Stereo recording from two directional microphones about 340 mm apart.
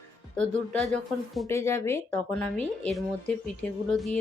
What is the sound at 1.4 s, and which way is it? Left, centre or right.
A woman's voice, centre.